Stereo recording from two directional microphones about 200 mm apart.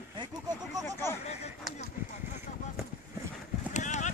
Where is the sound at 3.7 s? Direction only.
35° left (ahead or behind).